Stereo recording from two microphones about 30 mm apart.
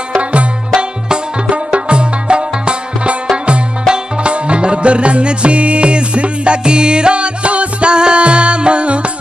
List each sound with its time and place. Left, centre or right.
0.2 s music: right
0.7 s music: right